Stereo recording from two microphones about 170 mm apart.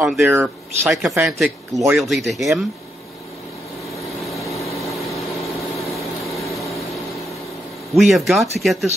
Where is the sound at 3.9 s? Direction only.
20° left (ahead or behind).